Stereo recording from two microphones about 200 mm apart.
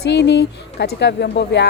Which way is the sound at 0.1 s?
60° left (ahead or behind).